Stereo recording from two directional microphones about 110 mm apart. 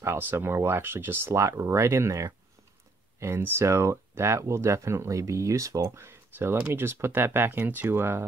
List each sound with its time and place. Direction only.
0.0 s speech: 20° right (ahead or behind)